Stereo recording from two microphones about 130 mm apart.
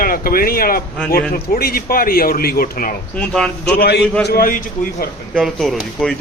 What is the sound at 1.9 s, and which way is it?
Speech, 90° left.